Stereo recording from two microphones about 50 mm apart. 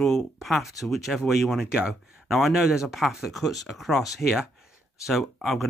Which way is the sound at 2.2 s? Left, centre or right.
Centre.